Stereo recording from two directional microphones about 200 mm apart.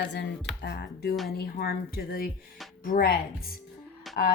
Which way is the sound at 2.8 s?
45° left (ahead or behind).